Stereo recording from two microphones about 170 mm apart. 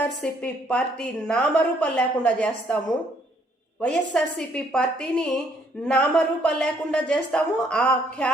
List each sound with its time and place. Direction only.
0.0 s a woman's voice: 5° left (ahead or behind)
3.8 s a woman's voice: 5° left (ahead or behind)